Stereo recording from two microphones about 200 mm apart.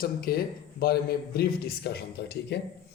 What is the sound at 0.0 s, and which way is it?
A man's voice, 50° left (ahead or behind).